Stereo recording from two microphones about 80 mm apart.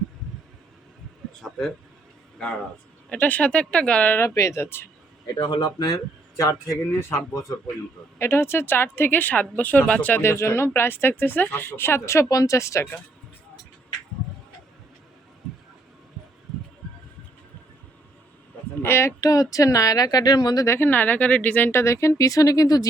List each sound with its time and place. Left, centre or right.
1.4 s speech: centre
3.1 s speech: centre
4.4 s speech: left
5.3 s a man's voice: left
6.4 s speech: left
8.2 s speech: left; by 10.2 s centre
10.2 s speech: left
18.8 s speech: left
19.2 s a woman's voice: left
20.7 s speech: left